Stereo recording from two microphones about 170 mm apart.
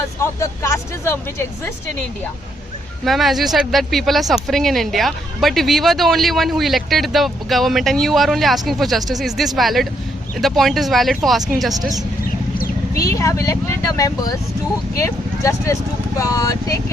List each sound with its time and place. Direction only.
0.2 s speech: 15° left (ahead or behind)
3.0 s speech: centre (ahead or behind)
13.0 s speech: 20° left (ahead or behind)